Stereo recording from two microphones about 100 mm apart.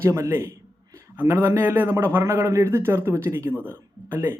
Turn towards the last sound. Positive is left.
turn(degrees=-25)  # may be behind; listen again after turning